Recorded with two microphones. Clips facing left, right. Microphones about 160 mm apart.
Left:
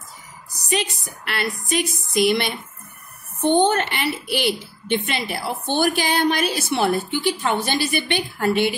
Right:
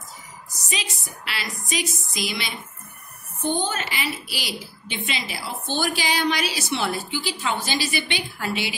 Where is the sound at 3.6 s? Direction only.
60° left (ahead or behind).